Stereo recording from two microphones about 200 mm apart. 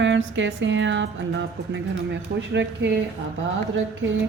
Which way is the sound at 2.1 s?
60° right (ahead or behind).